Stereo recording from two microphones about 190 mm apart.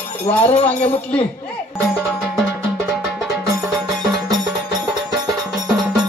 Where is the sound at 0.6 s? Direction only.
5° left (ahead or behind).